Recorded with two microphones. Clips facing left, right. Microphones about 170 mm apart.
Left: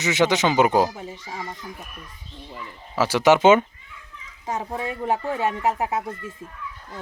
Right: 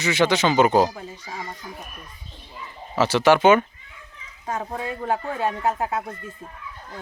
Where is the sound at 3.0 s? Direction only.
10° left (ahead or behind).